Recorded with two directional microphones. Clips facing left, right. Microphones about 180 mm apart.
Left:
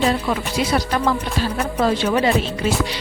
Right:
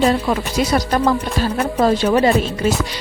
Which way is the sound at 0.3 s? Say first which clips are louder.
Right 3 dB; 40° right (ahead or behind).